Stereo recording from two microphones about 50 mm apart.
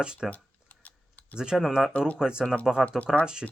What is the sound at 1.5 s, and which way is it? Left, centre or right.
Speech, centre.